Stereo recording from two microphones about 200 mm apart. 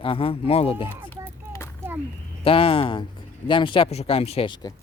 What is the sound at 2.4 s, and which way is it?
Speech, 25° left (ahead or behind).